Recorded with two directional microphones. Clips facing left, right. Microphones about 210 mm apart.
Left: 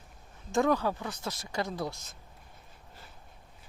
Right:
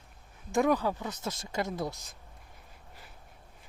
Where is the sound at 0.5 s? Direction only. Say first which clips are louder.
Even; 15° right (ahead or behind).